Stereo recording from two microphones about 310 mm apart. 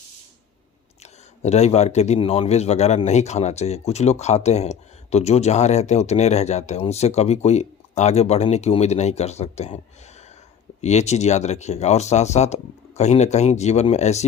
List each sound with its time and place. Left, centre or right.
1.4 s a man's voice: left